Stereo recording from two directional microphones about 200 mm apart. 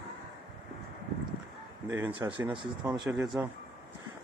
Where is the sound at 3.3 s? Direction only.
10° right (ahead or behind).